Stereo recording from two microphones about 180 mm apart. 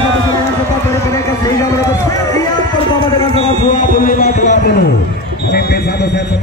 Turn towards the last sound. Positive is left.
turn(degrees=45)  # may be behind; listen again after turning